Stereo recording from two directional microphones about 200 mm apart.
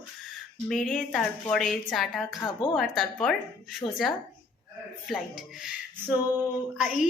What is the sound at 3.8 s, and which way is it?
Speech, 20° left (ahead or behind).